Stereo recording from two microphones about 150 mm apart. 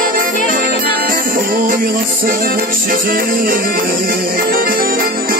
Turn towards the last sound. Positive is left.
turn(degrees=-75)  # may be behind; listen again after turning